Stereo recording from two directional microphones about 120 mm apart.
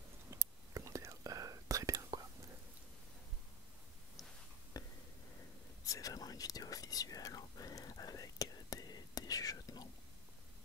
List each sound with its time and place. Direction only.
0.3 s whispering: 25° right (ahead or behind)
4.7 s a sound: 30° left (ahead or behind)
5.9 s whispering: 30° left (ahead or behind)